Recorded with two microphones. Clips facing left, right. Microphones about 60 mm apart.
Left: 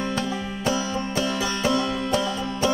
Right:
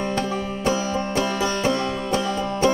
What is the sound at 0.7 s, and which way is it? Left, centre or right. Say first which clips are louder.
Music: right 2 dB; right.